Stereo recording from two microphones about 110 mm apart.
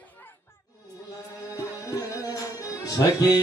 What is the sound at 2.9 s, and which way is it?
Music, 35° left (ahead or behind).